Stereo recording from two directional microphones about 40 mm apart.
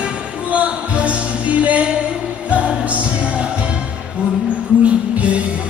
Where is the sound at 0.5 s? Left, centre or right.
Right.